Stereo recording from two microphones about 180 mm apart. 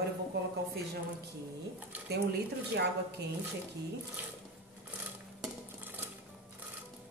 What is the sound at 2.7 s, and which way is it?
Speech, 65° right (ahead or behind).